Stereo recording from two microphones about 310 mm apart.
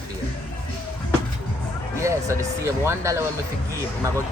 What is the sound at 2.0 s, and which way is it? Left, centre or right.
Speech, centre.